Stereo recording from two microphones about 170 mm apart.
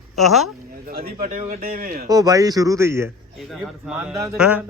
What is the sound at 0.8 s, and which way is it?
A man's voice, 60° right (ahead or behind).